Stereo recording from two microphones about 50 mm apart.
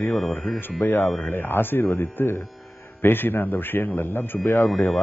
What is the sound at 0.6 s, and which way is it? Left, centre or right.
Speech, left.